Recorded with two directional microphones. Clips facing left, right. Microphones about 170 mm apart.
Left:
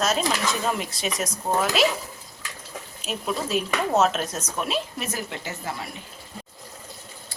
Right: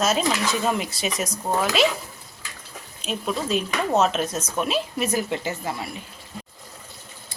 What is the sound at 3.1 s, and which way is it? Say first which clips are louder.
Speech: right 2 dB; 5° left (ahead or behind).